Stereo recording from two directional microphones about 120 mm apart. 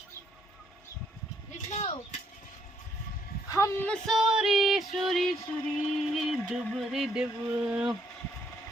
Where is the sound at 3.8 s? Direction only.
10° left (ahead or behind).